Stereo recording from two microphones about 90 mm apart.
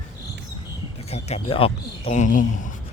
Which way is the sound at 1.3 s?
90° left.